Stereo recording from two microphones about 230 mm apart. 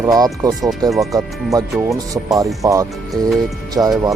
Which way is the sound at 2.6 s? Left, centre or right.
Centre.